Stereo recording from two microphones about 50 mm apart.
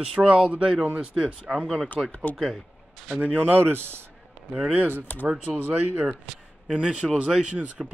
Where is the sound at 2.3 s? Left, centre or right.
Left.